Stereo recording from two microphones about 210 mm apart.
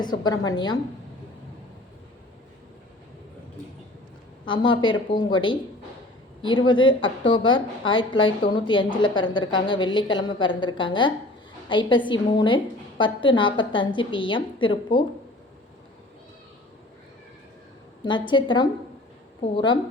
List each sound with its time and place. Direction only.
0.0 s a woman's voice: 20° left (ahead or behind)
4.4 s a woman's voice: 25° left (ahead or behind)
18.0 s a woman's voice: 20° left (ahead or behind)